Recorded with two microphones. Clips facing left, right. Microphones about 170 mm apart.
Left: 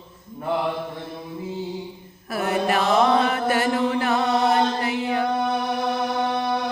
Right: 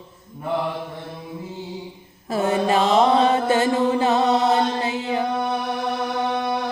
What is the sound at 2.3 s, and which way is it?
Chant, 25° right (ahead or behind).